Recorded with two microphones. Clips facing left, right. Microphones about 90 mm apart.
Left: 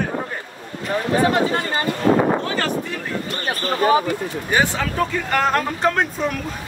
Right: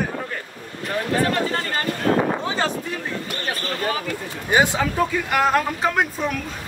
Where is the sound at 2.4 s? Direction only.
20° right (ahead or behind).